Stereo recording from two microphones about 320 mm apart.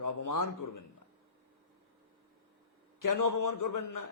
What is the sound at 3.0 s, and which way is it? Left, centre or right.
A man's voice, left.